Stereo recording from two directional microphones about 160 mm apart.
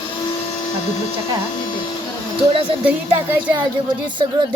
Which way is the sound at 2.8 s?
10° right (ahead or behind).